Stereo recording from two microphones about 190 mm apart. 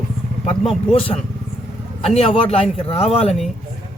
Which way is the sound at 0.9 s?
30° left (ahead or behind).